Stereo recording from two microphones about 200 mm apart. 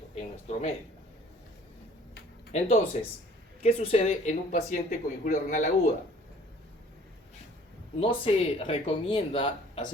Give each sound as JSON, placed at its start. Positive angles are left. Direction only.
{"t": 0.1, "sound": "a sound", "side_deg": 30}
{"t": 2.5, "sound": "speech", "side_deg": 30}
{"t": 7.9, "sound": "speech", "side_deg": 30}